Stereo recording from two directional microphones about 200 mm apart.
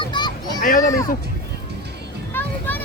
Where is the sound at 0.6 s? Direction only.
40° left (ahead or behind).